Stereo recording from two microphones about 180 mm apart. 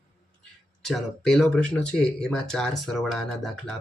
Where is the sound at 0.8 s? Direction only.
Centre (ahead or behind).